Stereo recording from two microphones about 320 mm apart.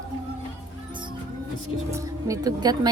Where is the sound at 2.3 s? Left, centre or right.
Centre.